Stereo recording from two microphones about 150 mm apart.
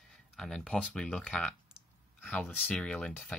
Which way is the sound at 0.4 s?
5° left (ahead or behind).